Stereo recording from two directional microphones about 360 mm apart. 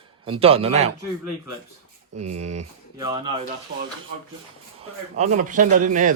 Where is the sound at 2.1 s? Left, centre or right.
Right.